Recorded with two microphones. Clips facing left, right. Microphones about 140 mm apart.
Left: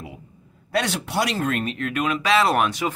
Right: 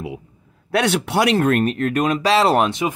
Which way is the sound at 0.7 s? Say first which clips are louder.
Right 5 dB; 70° right (ahead or behind).